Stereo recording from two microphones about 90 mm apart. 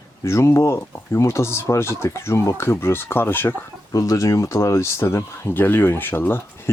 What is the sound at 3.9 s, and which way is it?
Speech, 40° left (ahead or behind).